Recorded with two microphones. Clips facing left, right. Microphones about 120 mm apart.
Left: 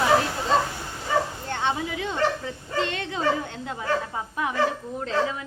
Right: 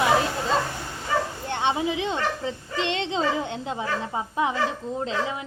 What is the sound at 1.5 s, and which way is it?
Speech, 20° right (ahead or behind).